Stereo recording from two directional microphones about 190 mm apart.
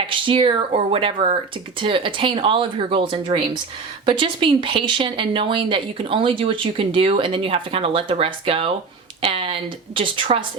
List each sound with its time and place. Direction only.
0.1 s speech: 25° right (ahead or behind)